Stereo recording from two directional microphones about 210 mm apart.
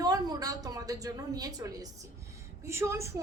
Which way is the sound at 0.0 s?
20° right (ahead or behind).